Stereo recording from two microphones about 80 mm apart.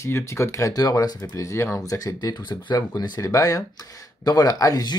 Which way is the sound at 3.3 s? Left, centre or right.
Left.